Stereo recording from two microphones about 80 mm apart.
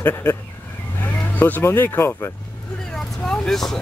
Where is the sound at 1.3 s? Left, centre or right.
Left.